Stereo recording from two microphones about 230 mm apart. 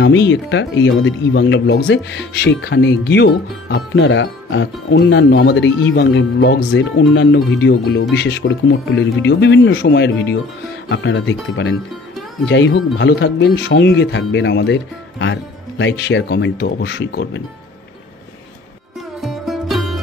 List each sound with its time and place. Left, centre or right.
0.0 s speech: left
19.2 s music: centre